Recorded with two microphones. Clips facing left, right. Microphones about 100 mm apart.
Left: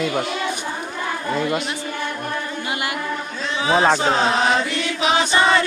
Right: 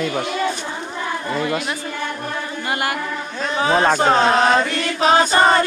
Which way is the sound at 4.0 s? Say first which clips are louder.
Right 4 dB; 50° right (ahead or behind).